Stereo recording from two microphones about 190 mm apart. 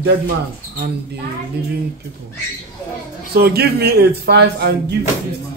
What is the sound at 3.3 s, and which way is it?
Speech, 55° right (ahead or behind).